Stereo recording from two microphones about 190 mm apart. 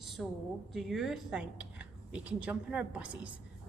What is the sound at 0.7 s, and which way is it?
A woman's voice, centre (ahead or behind).